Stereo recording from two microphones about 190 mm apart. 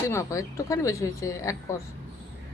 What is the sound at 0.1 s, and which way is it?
A woman's voice, 15° left (ahead or behind).